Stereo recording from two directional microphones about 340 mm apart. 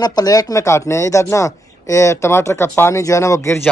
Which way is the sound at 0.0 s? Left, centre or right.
Centre.